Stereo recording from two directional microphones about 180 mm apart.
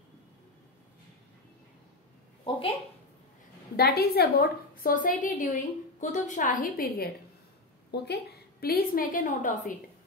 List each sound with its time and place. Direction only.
3.7 s a woman's voice: 60° left (ahead or behind)
7.9 s a woman's voice: 65° left (ahead or behind); by 9.7 s 45° left (ahead or behind)